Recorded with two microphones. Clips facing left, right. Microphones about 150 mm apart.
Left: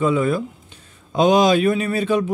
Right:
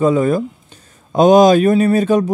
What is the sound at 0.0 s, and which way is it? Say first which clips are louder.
A man's voice: right 5 dB; 40° right (ahead or behind).